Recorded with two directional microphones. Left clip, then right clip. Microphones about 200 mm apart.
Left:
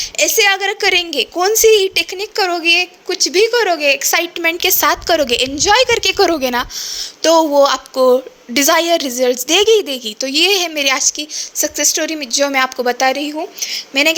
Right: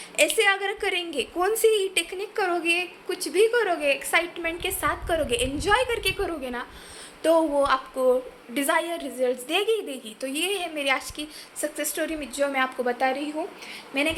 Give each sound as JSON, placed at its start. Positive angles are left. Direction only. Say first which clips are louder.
{"t": 0.0, "sound": "a woman's voice", "louder": "left 8 dB", "side_deg": 45}
{"t": 7.2, "sound": "a woman's voice", "louder": "left 10 dB", "side_deg": 45}